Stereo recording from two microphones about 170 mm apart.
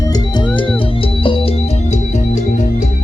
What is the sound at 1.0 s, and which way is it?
Organ, 30° left (ahead or behind).